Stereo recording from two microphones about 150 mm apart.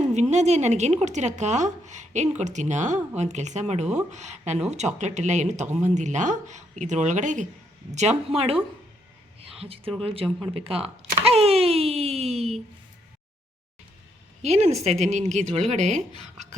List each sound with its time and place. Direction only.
0.1 s a woman's voice: 50° right (ahead or behind)
10.5 s a sound: 40° right (ahead or behind)
14.4 s speech: 45° right (ahead or behind)